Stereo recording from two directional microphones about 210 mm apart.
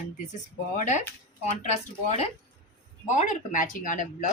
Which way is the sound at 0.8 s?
35° left (ahead or behind).